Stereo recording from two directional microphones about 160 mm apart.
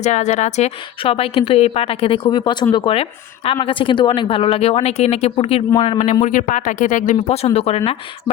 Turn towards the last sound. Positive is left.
turn(degrees=40)  # may be behind; listen again after turning